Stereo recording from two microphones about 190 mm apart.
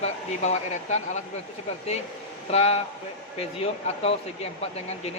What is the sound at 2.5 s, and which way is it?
Speech, 35° left (ahead or behind).